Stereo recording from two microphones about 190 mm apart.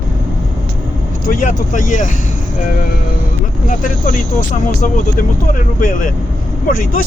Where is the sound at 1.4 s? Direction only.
45° left (ahead or behind).